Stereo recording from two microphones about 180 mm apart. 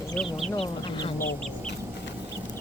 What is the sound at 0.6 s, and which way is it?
Speech, 30° left (ahead or behind).